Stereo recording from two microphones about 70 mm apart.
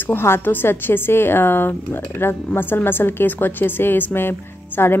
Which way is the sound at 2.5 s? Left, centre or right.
Left.